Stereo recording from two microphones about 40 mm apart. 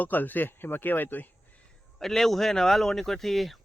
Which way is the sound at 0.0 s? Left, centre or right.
Left.